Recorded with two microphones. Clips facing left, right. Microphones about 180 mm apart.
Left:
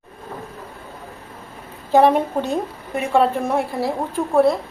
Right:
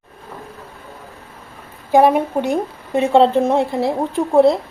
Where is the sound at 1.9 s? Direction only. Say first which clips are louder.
Right 2 dB; 10° right (ahead or behind).